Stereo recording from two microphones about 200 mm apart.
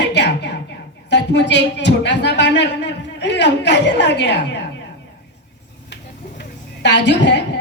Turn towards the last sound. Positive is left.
turn(degrees=60)  # may be behind; listen again after turning